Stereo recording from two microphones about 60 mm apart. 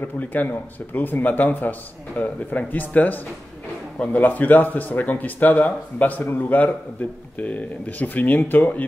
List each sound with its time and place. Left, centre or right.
0.0 s speech: left